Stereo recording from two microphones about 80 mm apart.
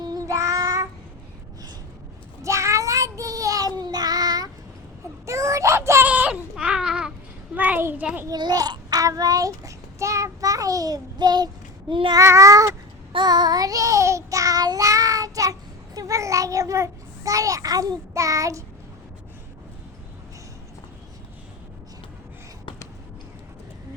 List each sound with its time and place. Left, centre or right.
0.0 s child singing: right
0.3 s child singing: right
2.4 s child singing: right
5.2 s child singing: right
6.1 s baby cry: centre
7.5 s a sound: right
8.3 s child singing: right
12.1 s child singing: right
13.1 s child singing: right
16.0 s a child's voice: right
18.1 s child singing: right